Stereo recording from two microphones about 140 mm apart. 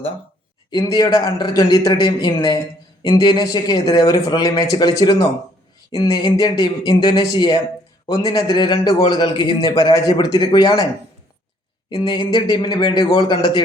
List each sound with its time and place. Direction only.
0.8 s a man's voice: 25° left (ahead or behind)
11.9 s a man's voice: 30° left (ahead or behind)